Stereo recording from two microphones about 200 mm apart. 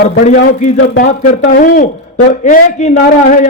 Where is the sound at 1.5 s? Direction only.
45° left (ahead or behind).